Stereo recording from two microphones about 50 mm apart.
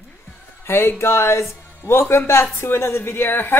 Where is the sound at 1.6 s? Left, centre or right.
Left.